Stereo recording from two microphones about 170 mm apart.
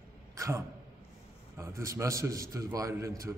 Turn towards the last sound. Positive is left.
turn(degrees=-20)  # may be behind; listen again after turning